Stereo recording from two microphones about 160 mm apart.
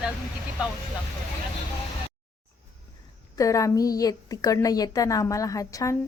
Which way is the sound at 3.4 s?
20° left (ahead or behind).